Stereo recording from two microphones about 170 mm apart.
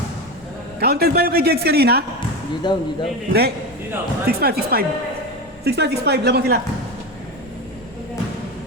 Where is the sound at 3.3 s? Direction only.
70° right (ahead or behind).